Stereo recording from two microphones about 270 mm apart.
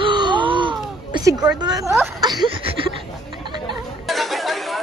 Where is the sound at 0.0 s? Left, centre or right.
Centre.